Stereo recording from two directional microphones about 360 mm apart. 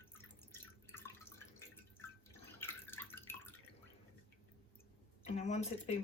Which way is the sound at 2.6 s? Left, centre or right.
Centre.